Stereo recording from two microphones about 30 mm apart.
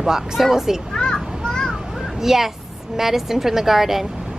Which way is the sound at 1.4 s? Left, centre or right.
Left.